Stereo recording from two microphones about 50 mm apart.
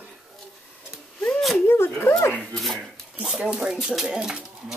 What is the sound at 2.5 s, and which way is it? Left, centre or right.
Speech, centre.